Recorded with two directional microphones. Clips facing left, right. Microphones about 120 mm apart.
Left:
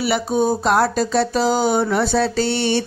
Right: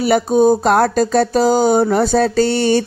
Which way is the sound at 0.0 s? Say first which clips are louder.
Right 6 dB; 45° right (ahead or behind).